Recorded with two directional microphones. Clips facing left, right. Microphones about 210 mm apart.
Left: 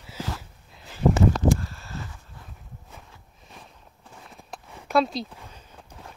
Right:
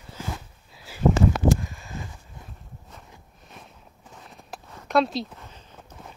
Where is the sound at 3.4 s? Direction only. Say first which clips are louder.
Even; centre (ahead or behind).